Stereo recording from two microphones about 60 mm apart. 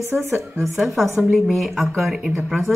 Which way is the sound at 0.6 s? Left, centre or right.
Centre.